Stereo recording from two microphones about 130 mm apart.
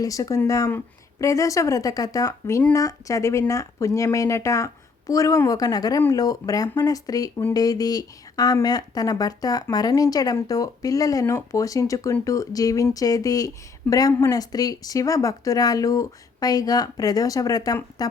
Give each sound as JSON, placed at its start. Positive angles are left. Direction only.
{"t": 0.0, "sound": "speech", "side_deg": 25}